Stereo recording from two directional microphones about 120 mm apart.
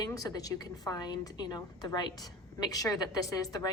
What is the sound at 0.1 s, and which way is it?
A woman's voice, 30° left (ahead or behind).